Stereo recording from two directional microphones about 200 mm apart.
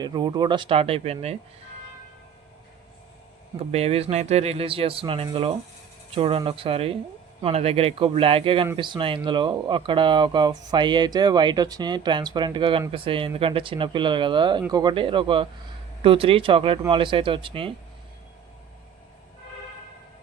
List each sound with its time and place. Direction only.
0.0 s speech: 20° right (ahead or behind)
3.6 s speech: 30° right (ahead or behind)